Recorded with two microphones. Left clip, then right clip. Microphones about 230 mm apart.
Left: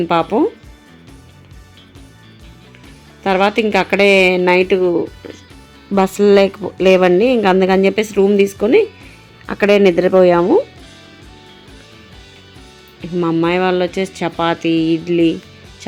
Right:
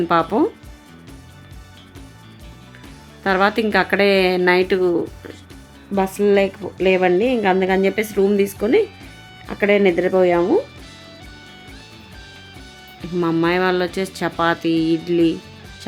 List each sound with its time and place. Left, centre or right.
0.0 s a woman's voice: centre
3.2 s a woman's voice: centre
5.9 s a woman's voice: left
8.2 s a woman's voice: centre
13.0 s a woman's voice: centre